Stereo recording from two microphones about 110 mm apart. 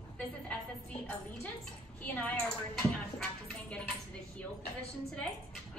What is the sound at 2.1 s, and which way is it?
Speech, 15° left (ahead or behind).